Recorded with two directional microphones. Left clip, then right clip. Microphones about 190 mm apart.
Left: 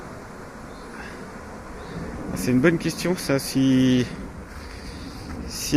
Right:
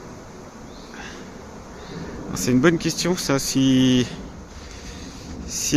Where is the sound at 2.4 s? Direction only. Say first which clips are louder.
Right 2 dB; 20° right (ahead or behind).